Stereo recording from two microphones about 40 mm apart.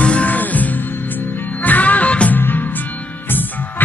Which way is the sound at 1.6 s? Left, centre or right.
Left.